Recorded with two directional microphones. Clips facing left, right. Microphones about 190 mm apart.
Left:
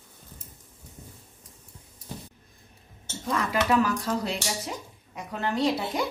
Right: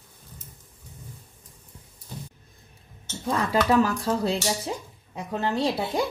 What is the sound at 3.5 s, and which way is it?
Speech, 30° right (ahead or behind).